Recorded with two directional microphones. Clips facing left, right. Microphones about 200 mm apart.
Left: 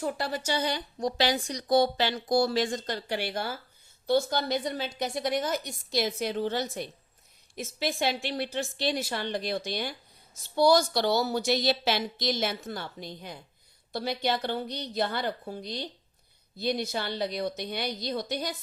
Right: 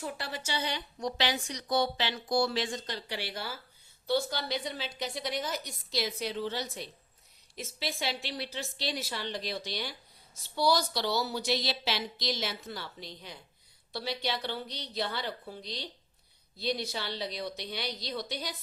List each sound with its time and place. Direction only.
0.0 s a woman's voice: 40° left (ahead or behind)